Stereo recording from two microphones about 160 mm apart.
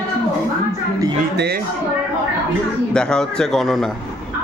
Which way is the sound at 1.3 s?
90° right.